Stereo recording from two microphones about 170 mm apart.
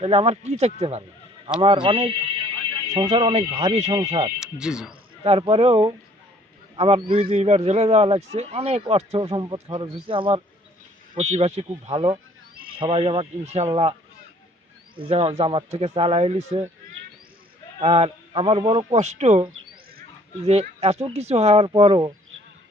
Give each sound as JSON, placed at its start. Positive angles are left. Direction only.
{"t": 0.0, "sound": "speech", "side_deg": -35}
{"t": 4.4, "sound": "speech", "side_deg": -5}
{"t": 5.2, "sound": "speech", "side_deg": -35}
{"t": 11.2, "sound": "speech", "side_deg": -40}
{"t": 14.9, "sound": "speech", "side_deg": -35}
{"t": 17.7, "sound": "speech", "side_deg": -35}
{"t": 20.5, "sound": "speech", "side_deg": -40}